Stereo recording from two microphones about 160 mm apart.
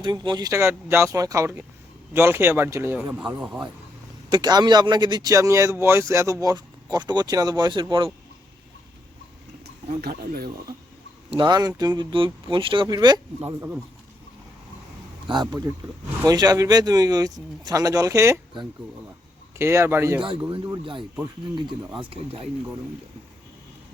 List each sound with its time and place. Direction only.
0.0 s speech: 30° right (ahead or behind); by 3.7 s 5° right (ahead or behind)
4.3 s speech: 25° right (ahead or behind)
10.0 s speech: 70° right (ahead or behind)
11.3 s speech: 30° right (ahead or behind)
15.3 s speech: 25° right (ahead or behind)
19.5 s speech: 15° right (ahead or behind)
22.0 s speech: 35° right (ahead or behind)